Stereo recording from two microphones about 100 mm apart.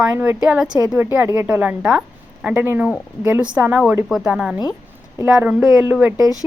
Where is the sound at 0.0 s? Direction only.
15° right (ahead or behind).